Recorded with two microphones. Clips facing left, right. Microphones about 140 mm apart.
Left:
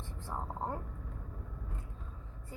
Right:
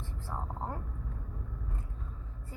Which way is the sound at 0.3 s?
15° left (ahead or behind).